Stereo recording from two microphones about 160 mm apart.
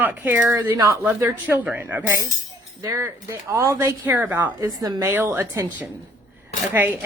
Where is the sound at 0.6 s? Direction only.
20° right (ahead or behind).